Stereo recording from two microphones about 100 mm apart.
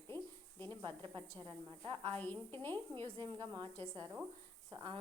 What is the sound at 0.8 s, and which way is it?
Speech, 55° right (ahead or behind).